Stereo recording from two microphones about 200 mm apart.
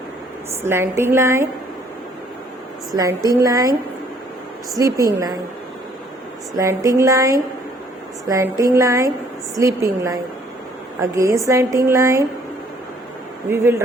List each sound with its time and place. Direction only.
0.6 s a woman's voice: 10° right (ahead or behind)
2.9 s a woman's voice: 15° right (ahead or behind)
4.8 s a woman's voice: 15° right (ahead or behind)
6.6 s a woman's voice: 15° right (ahead or behind)
13.5 s a woman's voice: 15° right (ahead or behind)